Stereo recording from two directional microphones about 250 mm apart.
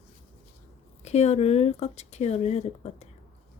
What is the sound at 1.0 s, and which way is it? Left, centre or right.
Speech, left.